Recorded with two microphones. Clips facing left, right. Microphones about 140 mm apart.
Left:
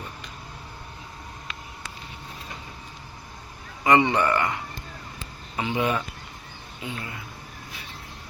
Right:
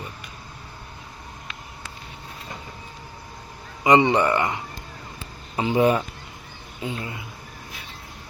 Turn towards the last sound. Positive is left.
turn(degrees=-25)  # may be behind; listen again after turning